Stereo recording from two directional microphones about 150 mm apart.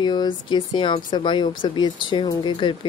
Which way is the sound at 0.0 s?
30° left (ahead or behind).